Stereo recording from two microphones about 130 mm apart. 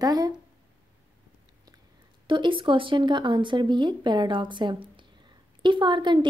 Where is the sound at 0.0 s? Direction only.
30° right (ahead or behind).